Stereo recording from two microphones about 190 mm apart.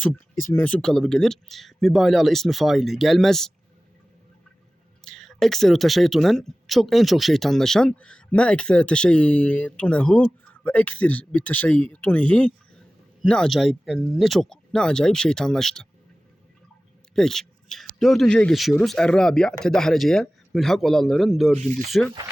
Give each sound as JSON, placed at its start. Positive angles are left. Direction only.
{"t": 0.5, "sound": "speech", "side_deg": 5}
{"t": 5.0, "sound": "speech", "side_deg": 0}
{"t": 17.2, "sound": "speech", "side_deg": 0}
{"t": 21.6, "sound": "speech", "side_deg": -40}